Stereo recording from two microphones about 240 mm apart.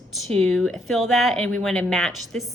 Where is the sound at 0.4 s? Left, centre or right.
Centre.